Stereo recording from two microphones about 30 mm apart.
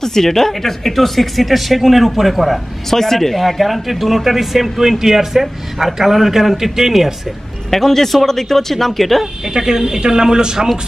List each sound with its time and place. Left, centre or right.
0.0 s speech: centre
2.9 s a man's voice: centre
7.7 s speech: centre
9.5 s speech: centre